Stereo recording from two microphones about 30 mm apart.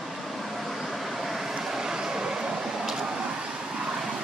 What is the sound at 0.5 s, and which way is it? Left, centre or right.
Vehicle, centre.